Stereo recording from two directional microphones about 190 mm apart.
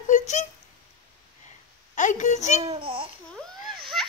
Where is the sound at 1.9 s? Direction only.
40° left (ahead or behind).